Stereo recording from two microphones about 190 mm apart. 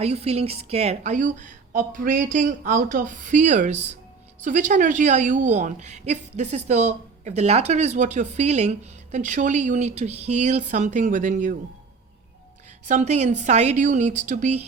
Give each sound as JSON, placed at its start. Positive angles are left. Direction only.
{"t": 0.0, "sound": "a woman's voice", "side_deg": -35}
{"t": 12.8, "sound": "a woman's voice", "side_deg": -40}